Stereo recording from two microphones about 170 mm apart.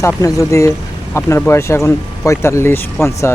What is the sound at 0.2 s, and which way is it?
Speech, 20° left (ahead or behind).